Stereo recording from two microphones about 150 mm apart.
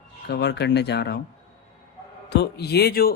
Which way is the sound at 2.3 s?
90° left.